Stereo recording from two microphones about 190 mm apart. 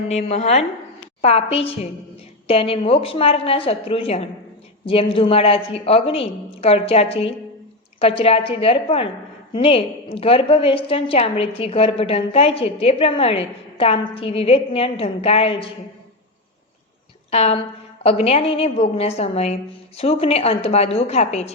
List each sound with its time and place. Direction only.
0.1 s a woman's voice: 35° left (ahead or behind)
17.3 s a woman's voice: 35° left (ahead or behind)